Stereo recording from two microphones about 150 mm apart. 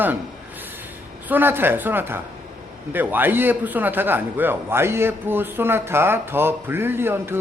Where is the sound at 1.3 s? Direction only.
15° right (ahead or behind).